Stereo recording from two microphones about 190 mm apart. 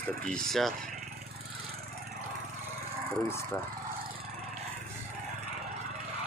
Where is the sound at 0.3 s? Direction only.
5° left (ahead or behind).